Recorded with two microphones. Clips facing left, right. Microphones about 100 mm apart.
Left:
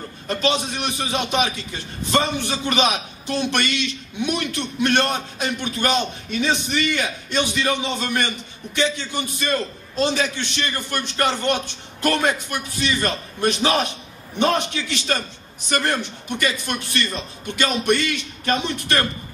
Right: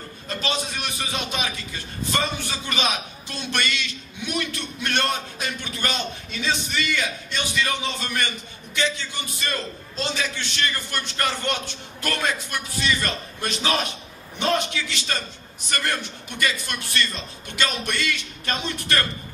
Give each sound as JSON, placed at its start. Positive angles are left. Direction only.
{"t": 0.3, "sound": "a man's voice", "side_deg": 20}